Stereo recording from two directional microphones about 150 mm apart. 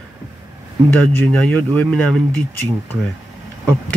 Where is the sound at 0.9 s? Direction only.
10° left (ahead or behind).